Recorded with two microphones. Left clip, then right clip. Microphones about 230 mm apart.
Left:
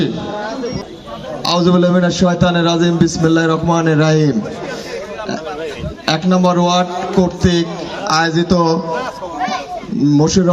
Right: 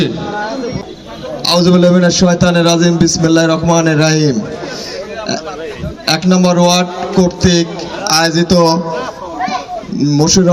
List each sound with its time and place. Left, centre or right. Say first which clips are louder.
1.5 s a man's voice: right 4 dB; right
6.1 s a man's voice: right 2 dB; right
10.0 s a man's voice: right 2 dB; right